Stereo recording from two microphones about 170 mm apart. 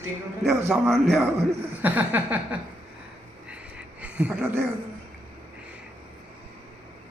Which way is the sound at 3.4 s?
5° right (ahead or behind).